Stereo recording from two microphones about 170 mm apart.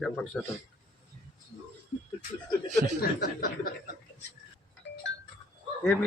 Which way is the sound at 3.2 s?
60° left (ahead or behind).